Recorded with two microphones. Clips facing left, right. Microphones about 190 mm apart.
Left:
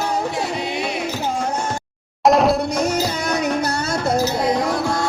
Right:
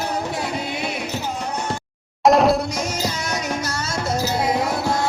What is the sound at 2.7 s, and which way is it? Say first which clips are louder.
Music: left 5 dB; 55° left (ahead or behind).